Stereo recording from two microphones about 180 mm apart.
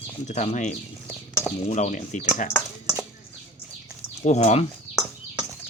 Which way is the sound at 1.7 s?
45° left (ahead or behind).